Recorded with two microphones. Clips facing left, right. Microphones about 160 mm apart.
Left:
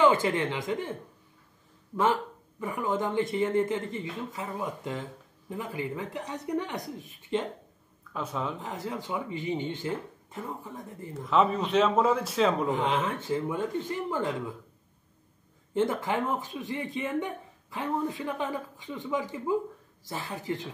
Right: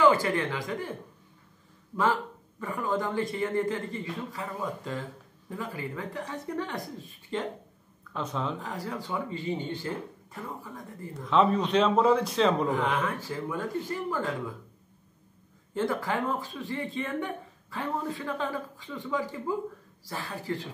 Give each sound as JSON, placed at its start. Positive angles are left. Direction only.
{"t": 0.0, "sound": "speech", "side_deg": 20}
{"t": 8.1, "sound": "a man's voice", "side_deg": 5}
{"t": 8.5, "sound": "speech", "side_deg": 20}
{"t": 11.2, "sound": "a man's voice", "side_deg": 5}
{"t": 12.7, "sound": "speech", "side_deg": 25}
{"t": 15.7, "sound": "speech", "side_deg": 20}